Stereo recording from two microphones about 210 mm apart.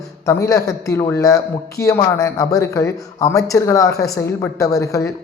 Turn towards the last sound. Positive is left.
turn(degrees=15)  # may be behind; listen again after turning